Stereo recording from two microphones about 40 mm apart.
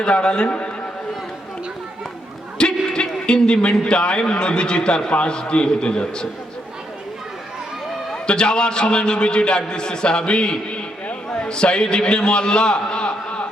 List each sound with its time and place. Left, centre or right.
0.0 s a man's voice: left
2.6 s a man's voice: left
8.1 s a man's voice: left